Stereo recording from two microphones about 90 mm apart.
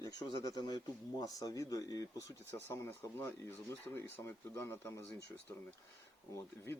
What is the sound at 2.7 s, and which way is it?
Speech, 25° left (ahead or behind).